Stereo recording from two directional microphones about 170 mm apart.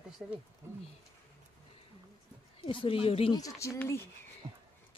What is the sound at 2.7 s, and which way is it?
Speech, 30° left (ahead or behind).